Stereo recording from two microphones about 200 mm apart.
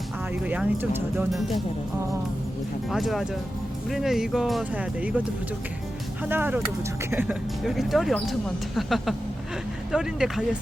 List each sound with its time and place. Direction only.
0.4 s speech: 5° right (ahead or behind)
2.9 s speech: centre (ahead or behind)
6.2 s speech: 10° right (ahead or behind)